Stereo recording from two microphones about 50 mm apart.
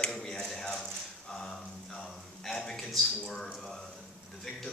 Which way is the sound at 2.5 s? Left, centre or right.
Centre.